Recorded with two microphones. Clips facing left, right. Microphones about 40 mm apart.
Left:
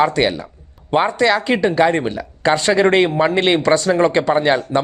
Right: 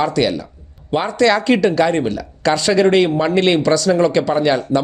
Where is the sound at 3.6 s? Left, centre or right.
Left.